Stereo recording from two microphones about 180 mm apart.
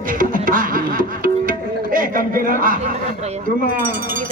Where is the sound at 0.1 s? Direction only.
50° right (ahead or behind).